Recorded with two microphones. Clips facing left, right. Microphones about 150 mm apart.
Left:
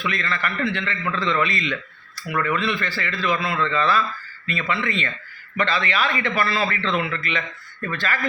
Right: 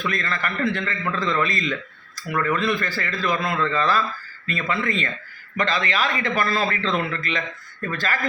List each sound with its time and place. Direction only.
0.1 s a man's voice: 40° right (ahead or behind)